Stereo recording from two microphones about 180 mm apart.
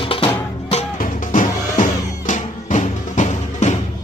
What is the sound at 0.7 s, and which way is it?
Music, 40° left (ahead or behind).